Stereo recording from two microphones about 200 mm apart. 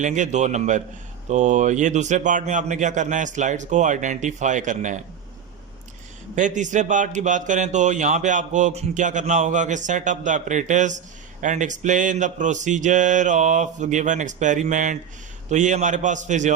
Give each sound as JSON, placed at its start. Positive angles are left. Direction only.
{"t": 0.0, "sound": "speech", "side_deg": -40}
{"t": 6.3, "sound": "speech", "side_deg": -40}